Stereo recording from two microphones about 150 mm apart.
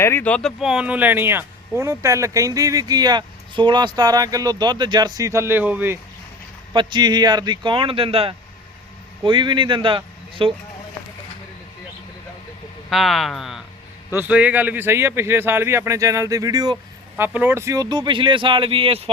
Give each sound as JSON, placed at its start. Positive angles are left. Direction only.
{"t": 0.0, "sound": "speech", "side_deg": 15}
{"t": 6.7, "sound": "speech", "side_deg": -30}
{"t": 12.9, "sound": "speech", "side_deg": 0}
{"t": 17.2, "sound": "speech", "side_deg": -10}